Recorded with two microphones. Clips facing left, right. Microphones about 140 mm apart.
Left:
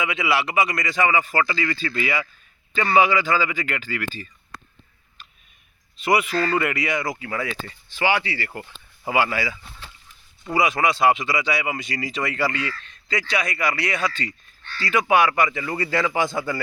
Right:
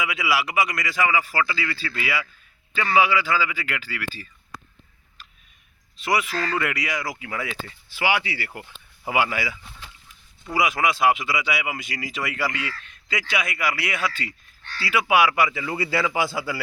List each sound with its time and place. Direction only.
0.0 s speech: 5° right (ahead or behind)
2.8 s speech: 40° left (ahead or behind)
3.1 s speech: 5° right (ahead or behind)
6.0 s speech: centre (ahead or behind)